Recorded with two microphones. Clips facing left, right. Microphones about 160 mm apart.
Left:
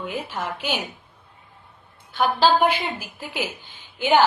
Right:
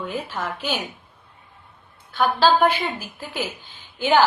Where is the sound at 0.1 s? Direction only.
15° left (ahead or behind).